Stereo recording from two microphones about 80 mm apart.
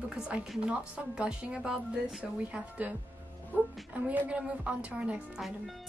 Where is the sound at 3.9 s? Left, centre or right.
Centre.